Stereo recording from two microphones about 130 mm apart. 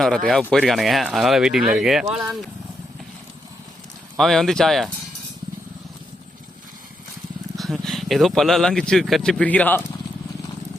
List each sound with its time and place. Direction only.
0.3 s speech: centre (ahead or behind)
4.2 s speech: centre (ahead or behind)
7.5 s speech: centre (ahead or behind)